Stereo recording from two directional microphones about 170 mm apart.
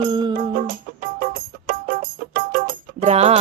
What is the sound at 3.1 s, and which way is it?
Music, 35° right (ahead or behind).